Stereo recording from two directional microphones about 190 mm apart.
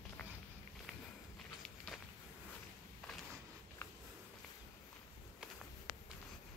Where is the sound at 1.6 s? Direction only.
5° left (ahead or behind).